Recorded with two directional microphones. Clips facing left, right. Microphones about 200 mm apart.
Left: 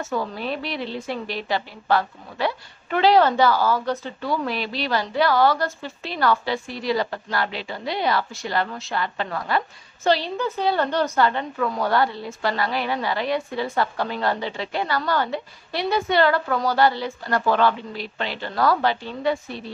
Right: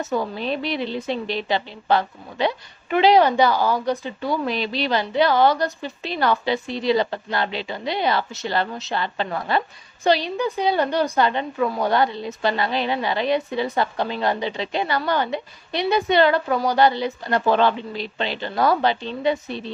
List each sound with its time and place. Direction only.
0.0 s a woman's voice: 20° right (ahead or behind)